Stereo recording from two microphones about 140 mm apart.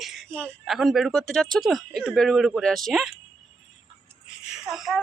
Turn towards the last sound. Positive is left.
turn(degrees=0)  # may be behind; listen again after turning